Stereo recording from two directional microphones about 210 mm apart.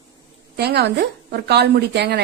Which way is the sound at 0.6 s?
50° right (ahead or behind).